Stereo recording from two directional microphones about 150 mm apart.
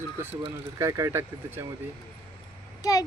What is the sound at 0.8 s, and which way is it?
Speech, 20° right (ahead or behind).